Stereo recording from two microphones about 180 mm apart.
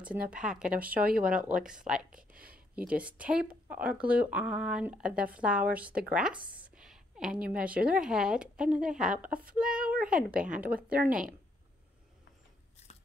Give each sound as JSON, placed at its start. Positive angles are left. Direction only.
{"t": 0.3, "sound": "speech", "side_deg": -5}
{"t": 1.0, "sound": "speech", "side_deg": -55}
{"t": 1.3, "sound": "speech", "side_deg": -5}
{"t": 2.3, "sound": "a sound", "side_deg": -55}
{"t": 2.7, "sound": "a woman's voice", "side_deg": -5}